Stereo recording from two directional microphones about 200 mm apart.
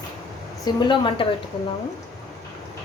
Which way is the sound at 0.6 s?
25° left (ahead or behind).